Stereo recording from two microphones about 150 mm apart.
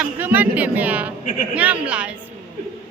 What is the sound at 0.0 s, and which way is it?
A woman's voice, 10° right (ahead or behind).